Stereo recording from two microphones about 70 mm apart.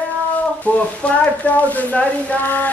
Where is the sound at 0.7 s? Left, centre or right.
Centre.